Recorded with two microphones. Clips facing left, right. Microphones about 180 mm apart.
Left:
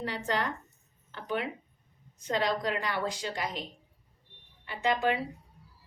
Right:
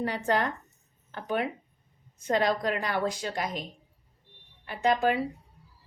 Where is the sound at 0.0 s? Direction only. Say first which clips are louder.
Right 4 dB; 45° right (ahead or behind).